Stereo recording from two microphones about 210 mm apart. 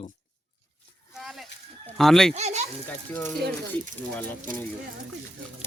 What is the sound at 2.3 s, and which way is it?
Speech, 35° right (ahead or behind).